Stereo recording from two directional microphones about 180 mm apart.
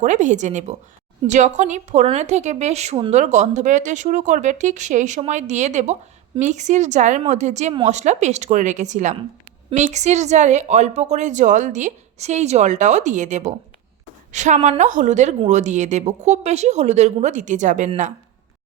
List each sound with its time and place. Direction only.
0.0 s a woman's voice: 40° right (ahead or behind)